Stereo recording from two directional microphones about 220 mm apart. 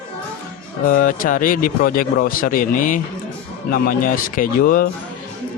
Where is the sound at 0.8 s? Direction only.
40° left (ahead or behind).